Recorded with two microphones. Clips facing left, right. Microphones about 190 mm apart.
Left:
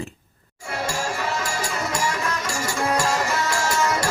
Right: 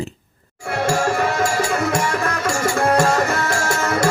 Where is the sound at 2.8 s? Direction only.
55° right (ahead or behind).